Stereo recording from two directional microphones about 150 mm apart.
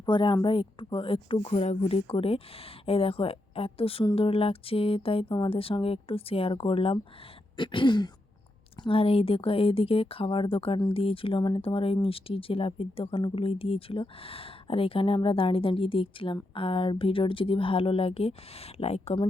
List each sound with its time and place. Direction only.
0.0 s speech: 30° left (ahead or behind)